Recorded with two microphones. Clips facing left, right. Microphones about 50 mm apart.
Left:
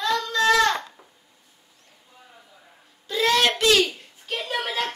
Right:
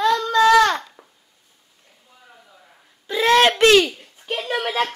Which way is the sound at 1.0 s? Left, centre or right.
Right.